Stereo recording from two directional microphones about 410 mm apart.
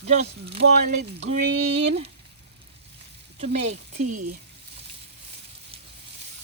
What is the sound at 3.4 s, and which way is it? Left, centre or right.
Speech, centre.